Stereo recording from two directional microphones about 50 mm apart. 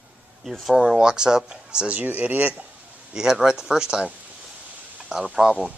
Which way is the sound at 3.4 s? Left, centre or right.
Centre.